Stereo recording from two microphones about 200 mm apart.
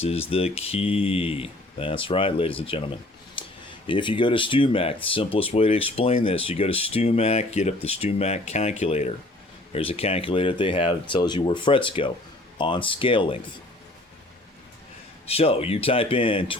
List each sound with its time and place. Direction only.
0.0 s speech: 30° left (ahead or behind)
15.3 s speech: 30° left (ahead or behind)